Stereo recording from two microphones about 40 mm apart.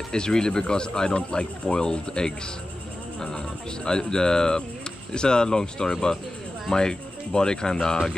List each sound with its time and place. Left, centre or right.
0.1 s speech: centre